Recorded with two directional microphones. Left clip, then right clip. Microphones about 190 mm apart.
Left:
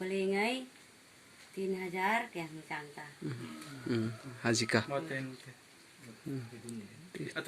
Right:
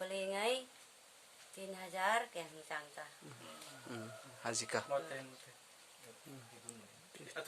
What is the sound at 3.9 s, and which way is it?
Speech, 5° left (ahead or behind).